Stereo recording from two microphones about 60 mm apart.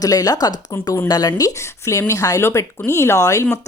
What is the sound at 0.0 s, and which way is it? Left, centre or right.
Speech, left.